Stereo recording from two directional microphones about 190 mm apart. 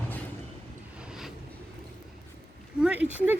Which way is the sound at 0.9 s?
5° right (ahead or behind).